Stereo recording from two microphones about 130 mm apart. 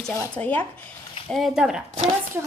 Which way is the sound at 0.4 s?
20° left (ahead or behind).